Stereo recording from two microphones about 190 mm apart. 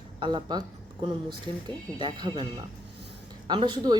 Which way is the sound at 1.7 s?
25° right (ahead or behind).